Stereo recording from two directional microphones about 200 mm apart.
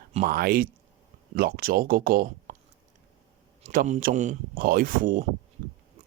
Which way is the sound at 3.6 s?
35° right (ahead or behind).